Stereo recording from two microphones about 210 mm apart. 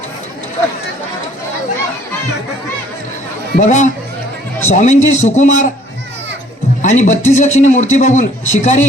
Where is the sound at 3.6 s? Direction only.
35° left (ahead or behind).